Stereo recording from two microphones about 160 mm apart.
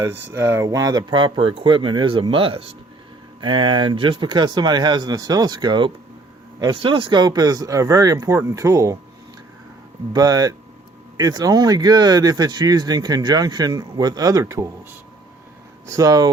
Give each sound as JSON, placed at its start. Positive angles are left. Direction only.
{"t": 0.0, "sound": "speech", "side_deg": -15}
{"t": 10.1, "sound": "speech", "side_deg": -25}
{"t": 15.9, "sound": "speech", "side_deg": -20}